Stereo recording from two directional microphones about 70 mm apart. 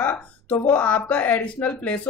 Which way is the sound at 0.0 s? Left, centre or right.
Left.